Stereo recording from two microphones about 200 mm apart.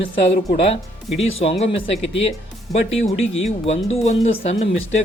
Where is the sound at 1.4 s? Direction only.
30° left (ahead or behind).